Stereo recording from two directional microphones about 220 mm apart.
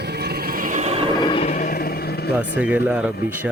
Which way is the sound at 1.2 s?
25° left (ahead or behind).